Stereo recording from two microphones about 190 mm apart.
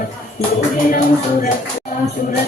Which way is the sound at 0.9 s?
45° left (ahead or behind).